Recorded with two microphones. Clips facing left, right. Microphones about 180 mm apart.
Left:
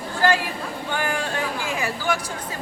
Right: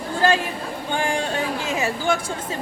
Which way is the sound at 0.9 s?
25° right (ahead or behind).